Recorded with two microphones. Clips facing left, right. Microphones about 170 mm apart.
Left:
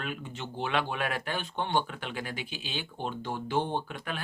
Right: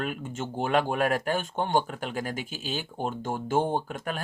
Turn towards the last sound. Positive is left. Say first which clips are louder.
# right 4 dB
turn(degrees=-40)  # may be behind; listen again after turning